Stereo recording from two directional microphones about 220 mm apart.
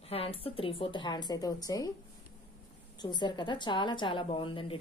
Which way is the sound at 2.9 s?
20° left (ahead or behind).